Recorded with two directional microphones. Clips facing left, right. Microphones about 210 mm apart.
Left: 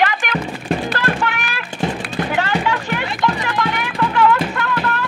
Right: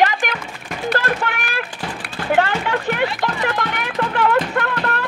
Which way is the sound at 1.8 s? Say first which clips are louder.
Left 7 dB; 25° left (ahead or behind).